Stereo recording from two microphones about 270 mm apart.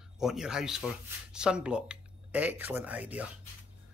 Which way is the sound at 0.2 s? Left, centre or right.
Centre.